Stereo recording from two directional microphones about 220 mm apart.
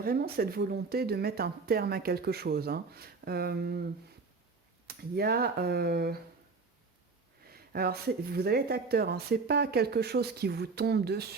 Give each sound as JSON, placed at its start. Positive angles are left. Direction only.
{"t": 0.0, "sound": "speech", "side_deg": -45}
{"t": 5.1, "sound": "speech", "side_deg": -45}
{"t": 7.4, "sound": "speech", "side_deg": -45}